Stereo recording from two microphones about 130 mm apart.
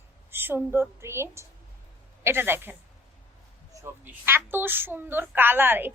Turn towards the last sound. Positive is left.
turn(degrees=-15)  # may be behind; listen again after turning